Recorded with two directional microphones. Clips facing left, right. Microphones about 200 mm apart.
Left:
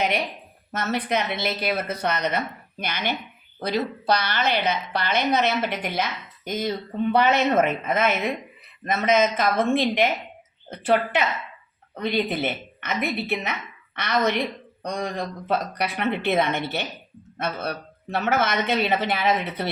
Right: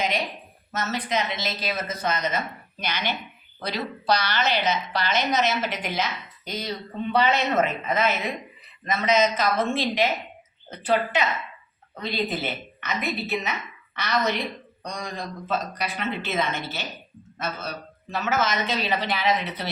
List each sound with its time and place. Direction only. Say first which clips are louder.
0.7 s a woman's voice: left 2 dB; 55° left (ahead or behind)